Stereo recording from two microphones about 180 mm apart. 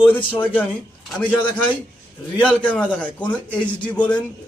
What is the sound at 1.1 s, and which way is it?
Speech, 5° left (ahead or behind).